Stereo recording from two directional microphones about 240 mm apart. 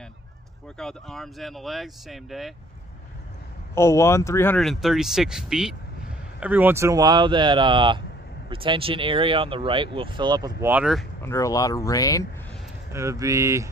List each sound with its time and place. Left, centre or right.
0.7 s speech: centre
3.7 s speech: centre
11.2 s speech: centre
12.9 s speech: centre